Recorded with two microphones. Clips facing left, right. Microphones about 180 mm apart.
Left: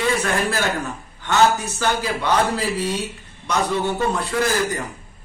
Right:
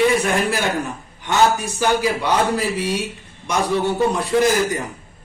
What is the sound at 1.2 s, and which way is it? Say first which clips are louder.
A man's voice: even; 15° right (ahead or behind).